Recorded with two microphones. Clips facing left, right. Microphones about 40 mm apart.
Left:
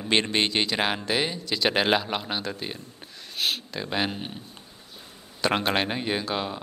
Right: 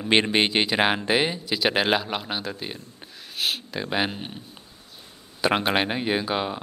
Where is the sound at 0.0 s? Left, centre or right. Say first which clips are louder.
Right 3 dB; centre.